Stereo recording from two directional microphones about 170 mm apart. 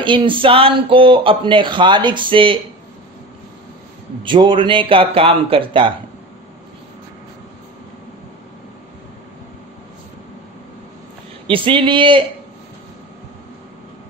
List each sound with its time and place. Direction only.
0.0 s speech: 30° right (ahead or behind)
4.2 s speech: 30° right (ahead or behind)
11.4 s speech: 30° right (ahead or behind)